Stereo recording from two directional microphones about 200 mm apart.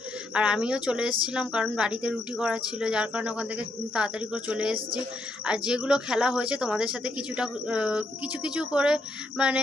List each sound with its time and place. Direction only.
0.3 s speech: 5° right (ahead or behind)